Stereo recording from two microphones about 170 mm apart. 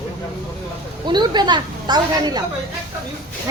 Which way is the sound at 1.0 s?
25° right (ahead or behind).